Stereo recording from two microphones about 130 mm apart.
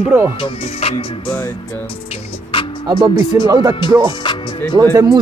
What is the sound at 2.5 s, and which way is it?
Music, 40° left (ahead or behind).